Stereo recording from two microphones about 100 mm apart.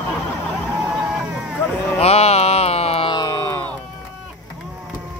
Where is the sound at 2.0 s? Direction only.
90° left.